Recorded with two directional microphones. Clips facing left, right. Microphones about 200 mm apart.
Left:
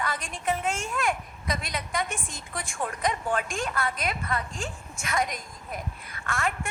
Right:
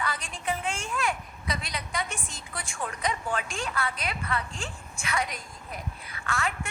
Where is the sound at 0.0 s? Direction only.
50° left (ahead or behind).